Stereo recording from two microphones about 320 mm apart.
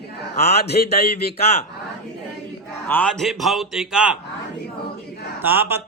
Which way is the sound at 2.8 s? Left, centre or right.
Centre.